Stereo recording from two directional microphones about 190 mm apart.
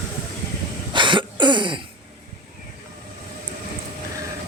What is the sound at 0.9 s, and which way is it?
Cough, 25° right (ahead or behind).